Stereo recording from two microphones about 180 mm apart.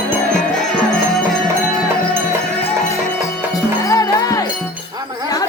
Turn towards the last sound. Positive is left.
turn(degrees=20)  # may be behind; listen again after turning